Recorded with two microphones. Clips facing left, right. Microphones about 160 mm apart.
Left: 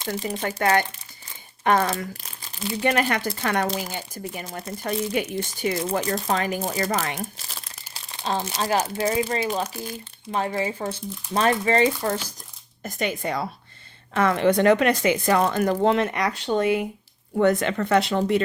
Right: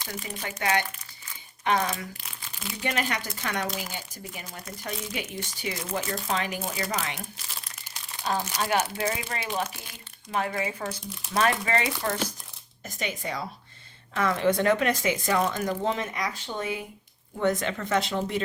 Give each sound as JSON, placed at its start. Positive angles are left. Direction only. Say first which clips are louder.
{"t": 0.2, "sound": "speech", "louder": "left 9 dB", "side_deg": 35}
{"t": 0.4, "sound": "speech", "louder": "left 5 dB", "side_deg": 50}
{"t": 6.0, "sound": "speech", "louder": "left 5 dB", "side_deg": 40}
{"t": 7.9, "sound": "speech", "louder": "left 2 dB", "side_deg": 25}
{"t": 12.8, "sound": "speech", "louder": "left 6 dB", "side_deg": 55}